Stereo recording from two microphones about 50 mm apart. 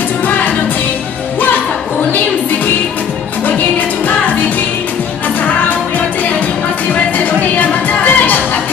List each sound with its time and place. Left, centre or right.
6.9 s music: left